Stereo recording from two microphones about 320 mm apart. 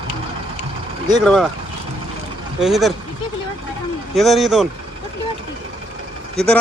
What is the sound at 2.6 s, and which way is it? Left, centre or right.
Speech, centre.